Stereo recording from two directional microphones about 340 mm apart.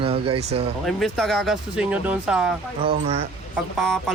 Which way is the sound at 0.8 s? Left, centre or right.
Centre.